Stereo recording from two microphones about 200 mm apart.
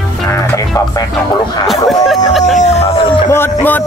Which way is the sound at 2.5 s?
30° left (ahead or behind).